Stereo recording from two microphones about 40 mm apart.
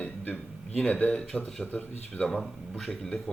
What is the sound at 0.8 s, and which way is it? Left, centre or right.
Speech, left.